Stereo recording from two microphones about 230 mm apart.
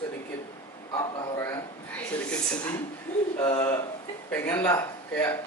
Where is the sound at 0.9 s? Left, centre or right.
Centre.